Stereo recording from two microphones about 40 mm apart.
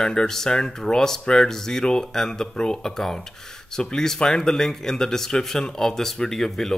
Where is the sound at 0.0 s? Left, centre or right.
Centre.